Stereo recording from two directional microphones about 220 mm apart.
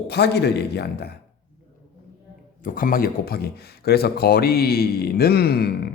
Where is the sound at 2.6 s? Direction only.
40° left (ahead or behind).